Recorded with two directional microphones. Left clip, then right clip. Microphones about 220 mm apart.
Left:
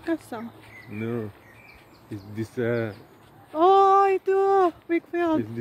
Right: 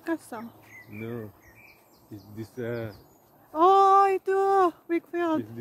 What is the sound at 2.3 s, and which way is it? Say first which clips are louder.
Speech: left 7 dB; 45° left (ahead or behind).